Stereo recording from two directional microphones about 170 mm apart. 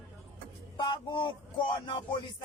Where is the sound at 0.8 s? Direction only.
30° left (ahead or behind).